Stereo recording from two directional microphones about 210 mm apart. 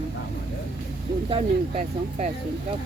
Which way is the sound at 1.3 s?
30° right (ahead or behind).